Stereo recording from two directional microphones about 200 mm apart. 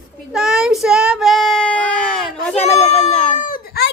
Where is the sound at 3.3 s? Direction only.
45° left (ahead or behind).